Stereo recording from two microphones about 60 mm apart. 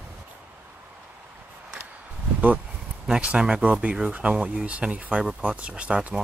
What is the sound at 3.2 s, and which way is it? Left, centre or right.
Speech, centre.